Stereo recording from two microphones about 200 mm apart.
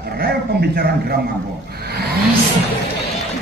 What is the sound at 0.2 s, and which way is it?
Speech, 50° right (ahead or behind).